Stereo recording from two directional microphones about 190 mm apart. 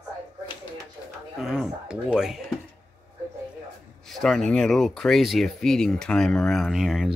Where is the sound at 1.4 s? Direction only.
Centre (ahead or behind).